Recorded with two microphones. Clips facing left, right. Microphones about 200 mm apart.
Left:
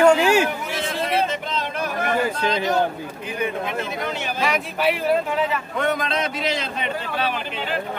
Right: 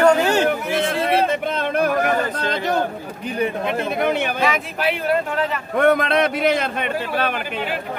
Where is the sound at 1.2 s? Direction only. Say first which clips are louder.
Right 5 dB; 55° right (ahead or behind).